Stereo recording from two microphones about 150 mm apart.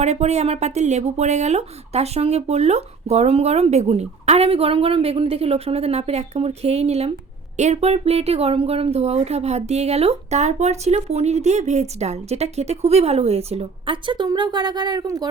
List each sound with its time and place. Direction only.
0.0 s speech: 45° right (ahead or behind); by 15.3 s 25° right (ahead or behind)